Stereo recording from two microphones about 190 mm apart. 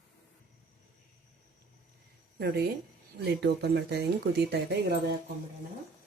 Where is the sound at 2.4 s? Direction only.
55° right (ahead or behind).